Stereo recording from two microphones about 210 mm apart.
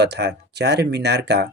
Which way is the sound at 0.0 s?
55° right (ahead or behind).